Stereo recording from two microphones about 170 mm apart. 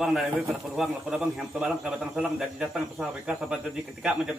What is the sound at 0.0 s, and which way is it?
A man's voice, 5° right (ahead or behind).